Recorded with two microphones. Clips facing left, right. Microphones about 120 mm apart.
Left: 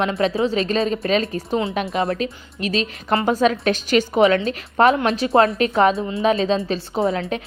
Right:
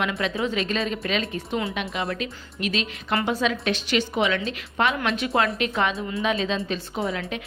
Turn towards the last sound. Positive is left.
turn(degrees=30)  # may be behind; listen again after turning